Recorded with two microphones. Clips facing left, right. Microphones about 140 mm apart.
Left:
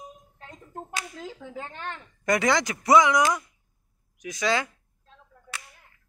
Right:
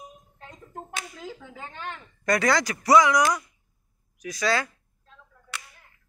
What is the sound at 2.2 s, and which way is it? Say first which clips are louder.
Speech: even; 20° left (ahead or behind).